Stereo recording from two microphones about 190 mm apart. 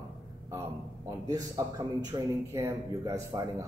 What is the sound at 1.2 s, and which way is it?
A man's voice, 20° right (ahead or behind).